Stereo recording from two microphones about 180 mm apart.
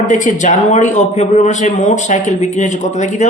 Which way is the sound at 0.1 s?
45° left (ahead or behind).